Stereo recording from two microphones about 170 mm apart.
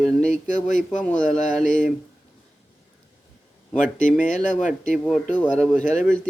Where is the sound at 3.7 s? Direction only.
50° left (ahead or behind).